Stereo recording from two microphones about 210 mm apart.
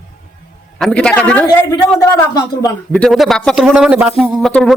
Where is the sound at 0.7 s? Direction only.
5° left (ahead or behind).